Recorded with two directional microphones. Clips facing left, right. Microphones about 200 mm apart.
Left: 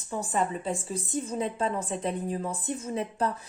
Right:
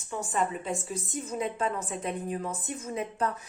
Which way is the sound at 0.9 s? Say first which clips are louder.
Left 3 dB; 30° left (ahead or behind).